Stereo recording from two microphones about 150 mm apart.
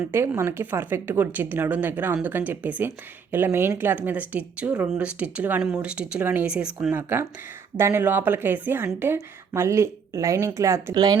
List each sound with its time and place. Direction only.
0.1 s a woman's voice: 15° right (ahead or behind)